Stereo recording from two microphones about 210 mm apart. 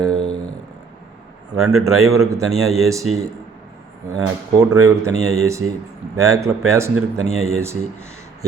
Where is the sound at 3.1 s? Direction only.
90° right.